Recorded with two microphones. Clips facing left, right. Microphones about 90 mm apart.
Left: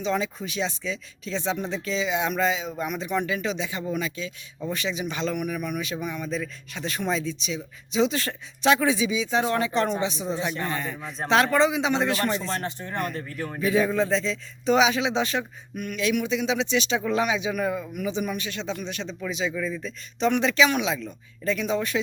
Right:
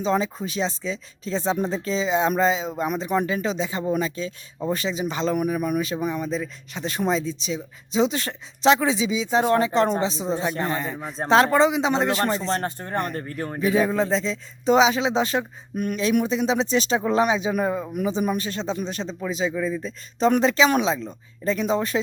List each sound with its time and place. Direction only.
0.0 s speech: 35° right (ahead or behind)
9.4 s a man's voice: 40° right (ahead or behind)
12.6 s speech: 45° right (ahead or behind)
13.6 s speech: 25° right (ahead or behind)
19.5 s a man's voice: 20° right (ahead or behind)
19.8 s speech: 35° right (ahead or behind)